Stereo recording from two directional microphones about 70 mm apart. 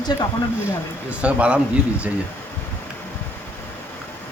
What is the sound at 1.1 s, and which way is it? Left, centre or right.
Speech, centre.